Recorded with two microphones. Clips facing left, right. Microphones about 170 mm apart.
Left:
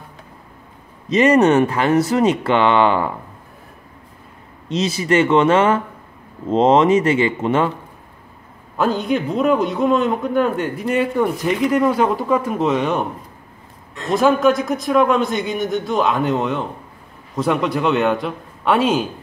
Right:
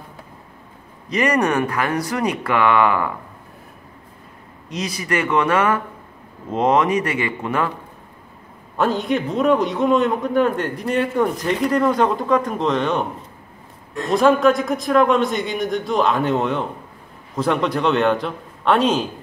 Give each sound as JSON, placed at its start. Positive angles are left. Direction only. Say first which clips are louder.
{"t": 1.0, "sound": "speech", "louder": "left 6 dB", "side_deg": 25}
{"t": 4.6, "sound": "speech", "louder": "left 6 dB", "side_deg": 25}
{"t": 8.7, "sound": "a man's voice", "louder": "left 1 dB", "side_deg": 0}
{"t": 14.1, "sound": "a man's voice", "louder": "even", "side_deg": 0}